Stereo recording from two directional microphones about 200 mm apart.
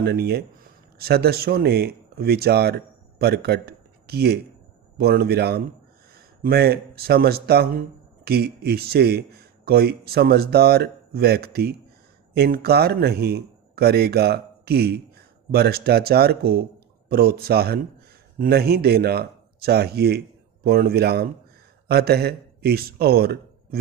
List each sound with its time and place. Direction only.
0.0 s speech: 50° right (ahead or behind)